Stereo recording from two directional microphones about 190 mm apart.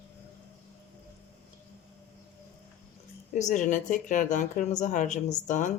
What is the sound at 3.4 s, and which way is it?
Speech, 40° left (ahead or behind).